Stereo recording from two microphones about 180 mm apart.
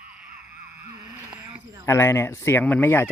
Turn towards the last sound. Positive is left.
turn(degrees=10)  # may be behind; listen again after turning